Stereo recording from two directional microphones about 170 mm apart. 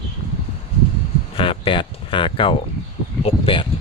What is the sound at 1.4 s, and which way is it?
Speech, 30° left (ahead or behind).